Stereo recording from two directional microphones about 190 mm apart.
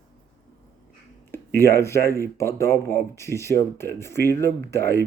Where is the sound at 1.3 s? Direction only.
10° left (ahead or behind).